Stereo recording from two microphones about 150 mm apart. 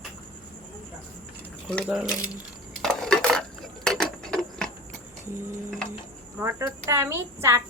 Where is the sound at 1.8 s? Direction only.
5° right (ahead or behind).